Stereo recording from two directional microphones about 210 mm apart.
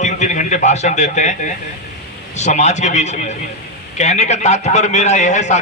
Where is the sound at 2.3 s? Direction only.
35° left (ahead or behind).